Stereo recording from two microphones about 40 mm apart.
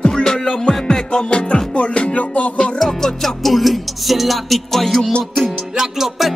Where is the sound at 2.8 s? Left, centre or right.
Centre.